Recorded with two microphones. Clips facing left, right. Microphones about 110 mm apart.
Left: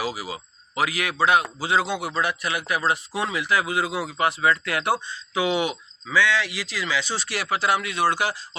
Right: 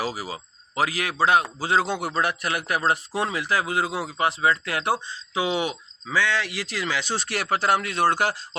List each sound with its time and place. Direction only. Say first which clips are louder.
0.0 s speech: even; 40° right (ahead or behind)
3.2 s speech: left 1 dB; 35° right (ahead or behind)